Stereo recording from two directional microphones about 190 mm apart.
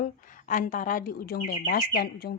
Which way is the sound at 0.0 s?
45° left (ahead or behind).